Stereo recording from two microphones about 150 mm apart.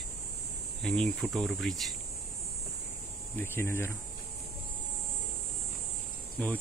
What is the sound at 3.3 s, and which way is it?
Speech, 15° left (ahead or behind).